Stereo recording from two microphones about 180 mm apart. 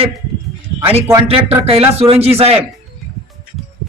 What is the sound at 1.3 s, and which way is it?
A man's voice, 30° right (ahead or behind).